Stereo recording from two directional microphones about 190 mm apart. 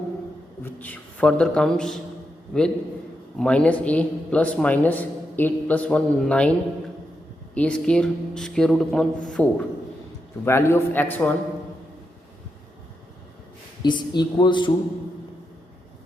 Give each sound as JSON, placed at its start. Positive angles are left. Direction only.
{"t": 0.6, "sound": "a man's voice", "side_deg": 10}
{"t": 13.8, "sound": "speech", "side_deg": 25}